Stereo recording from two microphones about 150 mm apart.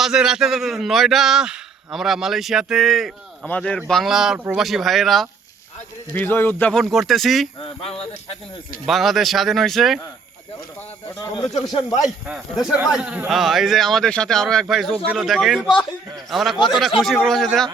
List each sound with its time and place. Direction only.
0.0 s speech: 5° right (ahead or behind)
6.1 s speech: 15° left (ahead or behind)
7.6 s speech: 40° left (ahead or behind)
8.9 s speech: centre (ahead or behind)
12.0 s speech: 5° right (ahead or behind)